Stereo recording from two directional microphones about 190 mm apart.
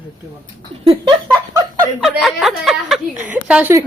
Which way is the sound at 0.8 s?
30° right (ahead or behind).